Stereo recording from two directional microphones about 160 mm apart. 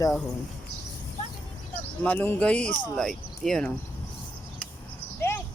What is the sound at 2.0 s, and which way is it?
Speech, 10° left (ahead or behind).